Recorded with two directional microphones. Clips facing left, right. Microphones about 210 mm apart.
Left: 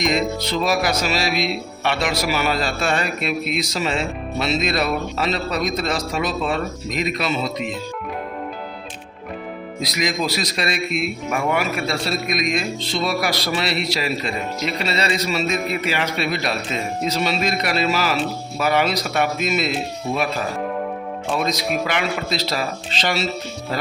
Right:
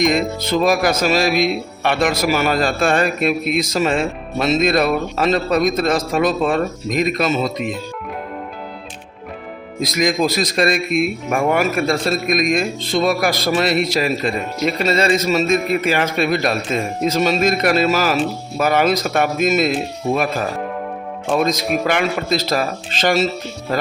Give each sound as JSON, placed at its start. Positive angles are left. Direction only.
{"t": 0.1, "sound": "speech", "side_deg": -50}
{"t": 9.8, "sound": "speech", "side_deg": -50}
{"t": 21.3, "sound": "speech", "side_deg": -50}